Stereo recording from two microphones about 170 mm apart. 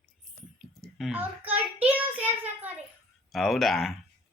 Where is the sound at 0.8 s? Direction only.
Centre (ahead or behind).